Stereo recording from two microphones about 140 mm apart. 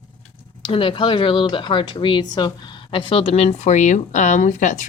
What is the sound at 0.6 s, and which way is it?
Speech, 40° left (ahead or behind).